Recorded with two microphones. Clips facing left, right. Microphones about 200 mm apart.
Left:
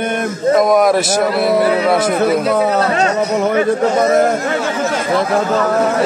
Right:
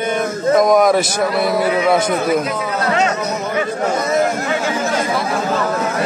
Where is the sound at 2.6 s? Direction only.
35° left (ahead or behind).